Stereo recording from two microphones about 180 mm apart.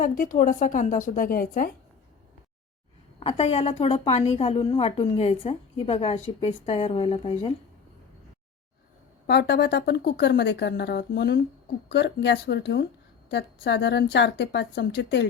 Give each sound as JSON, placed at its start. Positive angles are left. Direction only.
{"t": 0.0, "sound": "a woman's voice", "side_deg": 50}
{"t": 3.2, "sound": "a woman's voice", "side_deg": 35}
{"t": 9.2, "sound": "speech", "side_deg": 65}